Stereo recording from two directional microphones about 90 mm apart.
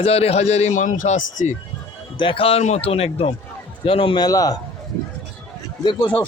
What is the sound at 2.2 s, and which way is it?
A man's voice, 75° left (ahead or behind).